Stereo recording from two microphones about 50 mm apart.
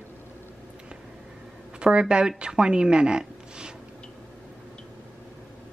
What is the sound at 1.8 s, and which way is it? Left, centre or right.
Speech, centre.